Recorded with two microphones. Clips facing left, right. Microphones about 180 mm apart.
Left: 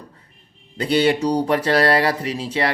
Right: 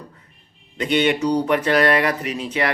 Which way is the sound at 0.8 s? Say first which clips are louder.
Left 1 dB; 35° left (ahead or behind).